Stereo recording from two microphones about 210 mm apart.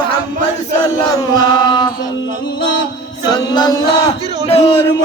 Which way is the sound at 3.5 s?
20° left (ahead or behind).